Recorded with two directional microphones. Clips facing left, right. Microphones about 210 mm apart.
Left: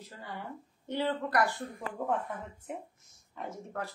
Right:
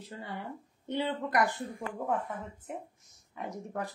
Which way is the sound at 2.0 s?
5° right (ahead or behind).